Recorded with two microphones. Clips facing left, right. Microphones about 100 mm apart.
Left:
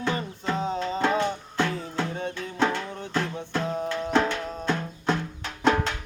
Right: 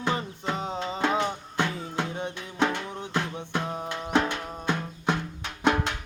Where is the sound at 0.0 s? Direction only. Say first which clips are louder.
Even; 15° right (ahead or behind).